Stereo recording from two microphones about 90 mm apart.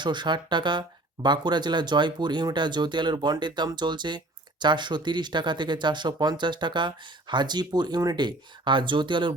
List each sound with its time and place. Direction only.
0.0 s speech: 55° right (ahead or behind)